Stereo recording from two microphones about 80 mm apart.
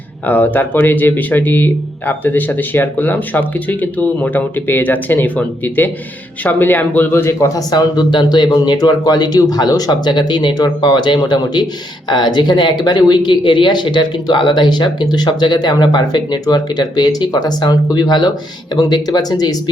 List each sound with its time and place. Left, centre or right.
0.3 s speech: left
7.4 s speech: left